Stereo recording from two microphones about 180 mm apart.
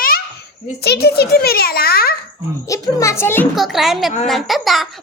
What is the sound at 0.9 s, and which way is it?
A child's voice, 65° left (ahead or behind).